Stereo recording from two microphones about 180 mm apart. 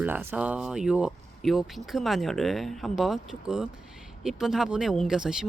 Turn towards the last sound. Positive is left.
turn(degrees=-5)  # may be behind; listen again after turning